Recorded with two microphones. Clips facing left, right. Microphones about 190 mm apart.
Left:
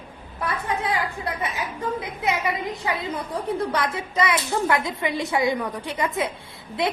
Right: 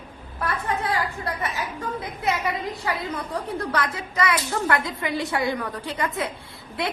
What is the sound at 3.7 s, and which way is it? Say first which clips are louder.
A woman's voice: left 1 dB; 20° left (ahead or behind).